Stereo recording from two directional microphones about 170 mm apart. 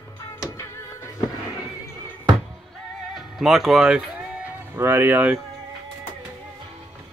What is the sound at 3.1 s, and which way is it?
Speech, centre (ahead or behind).